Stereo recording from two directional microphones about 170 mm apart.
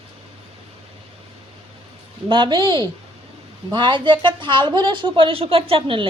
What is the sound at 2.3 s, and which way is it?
Speech, 30° right (ahead or behind).